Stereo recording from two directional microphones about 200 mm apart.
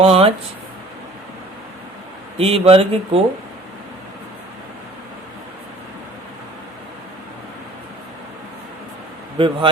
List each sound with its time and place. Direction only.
0.0 s speech: 30° right (ahead or behind)
2.4 s speech: 30° right (ahead or behind)
9.4 s speech: 30° right (ahead or behind)